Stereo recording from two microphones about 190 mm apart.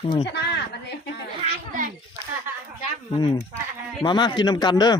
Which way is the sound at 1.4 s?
40° right (ahead or behind).